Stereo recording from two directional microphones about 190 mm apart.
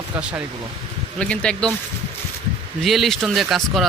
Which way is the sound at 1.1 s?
5° left (ahead or behind).